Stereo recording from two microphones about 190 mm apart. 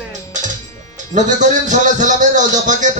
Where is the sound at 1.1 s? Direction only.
40° right (ahead or behind).